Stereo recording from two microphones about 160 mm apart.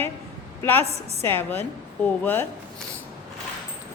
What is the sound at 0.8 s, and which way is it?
Speech, 40° right (ahead or behind).